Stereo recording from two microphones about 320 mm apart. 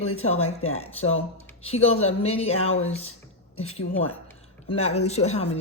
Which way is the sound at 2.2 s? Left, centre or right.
Centre.